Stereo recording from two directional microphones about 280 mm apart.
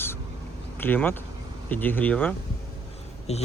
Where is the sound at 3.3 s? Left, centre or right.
Left.